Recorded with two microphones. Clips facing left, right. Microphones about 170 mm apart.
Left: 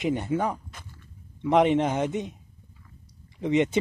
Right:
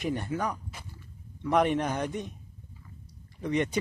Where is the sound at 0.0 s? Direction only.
20° left (ahead or behind).